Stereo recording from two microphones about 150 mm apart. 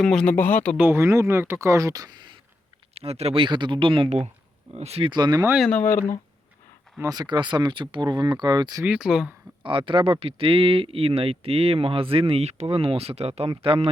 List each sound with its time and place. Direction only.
0.0 s speech: 5° left (ahead or behind)
0.8 s speech: 15° right (ahead or behind)
2.9 s speech: 45° right (ahead or behind)
5.1 s speech: 30° right (ahead or behind)
5.8 s speech: 15° left (ahead or behind)
7.0 s speech: 25° right (ahead or behind)
8.8 s speech: 5° right (ahead or behind)
9.6 s speech: 35° right (ahead or behind)